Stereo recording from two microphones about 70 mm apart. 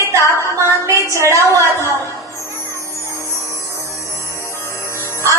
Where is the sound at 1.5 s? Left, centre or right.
Right.